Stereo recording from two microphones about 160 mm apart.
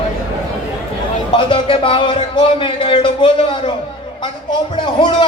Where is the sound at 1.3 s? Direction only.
30° left (ahead or behind).